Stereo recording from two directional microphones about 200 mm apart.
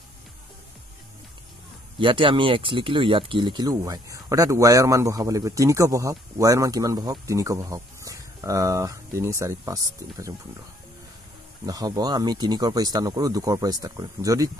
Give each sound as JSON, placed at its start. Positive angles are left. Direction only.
{"t": 2.0, "sound": "speech", "side_deg": -25}
{"t": 11.6, "sound": "speech", "side_deg": -20}